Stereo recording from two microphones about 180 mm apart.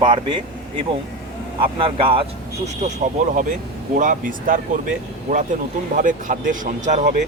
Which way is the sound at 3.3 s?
45° right (ahead or behind).